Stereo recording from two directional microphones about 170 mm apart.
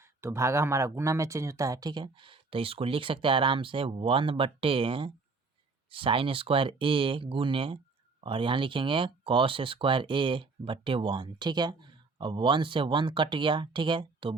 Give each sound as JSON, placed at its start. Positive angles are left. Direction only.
{"t": 0.0, "sound": "speech", "side_deg": -15}